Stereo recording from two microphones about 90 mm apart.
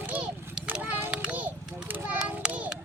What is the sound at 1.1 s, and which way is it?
Children playing, 15° right (ahead or behind).